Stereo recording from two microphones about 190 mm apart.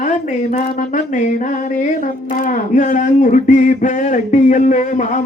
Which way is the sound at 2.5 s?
40° left (ahead or behind).